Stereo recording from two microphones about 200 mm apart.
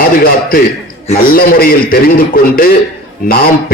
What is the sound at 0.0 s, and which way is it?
A man's voice, 45° left (ahead or behind).